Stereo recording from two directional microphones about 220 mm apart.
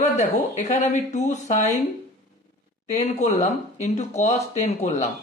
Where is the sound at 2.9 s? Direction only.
30° left (ahead or behind).